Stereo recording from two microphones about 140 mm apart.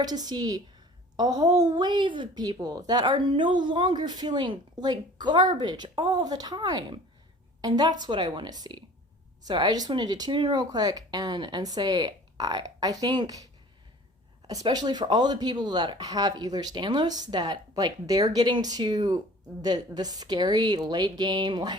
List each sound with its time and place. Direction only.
0.0 s a woman's voice: 30° right (ahead or behind)